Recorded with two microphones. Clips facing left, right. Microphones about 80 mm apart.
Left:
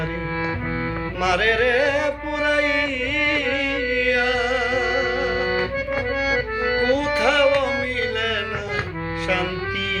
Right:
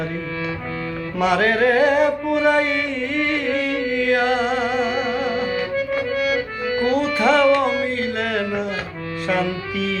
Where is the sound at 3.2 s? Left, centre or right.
Right.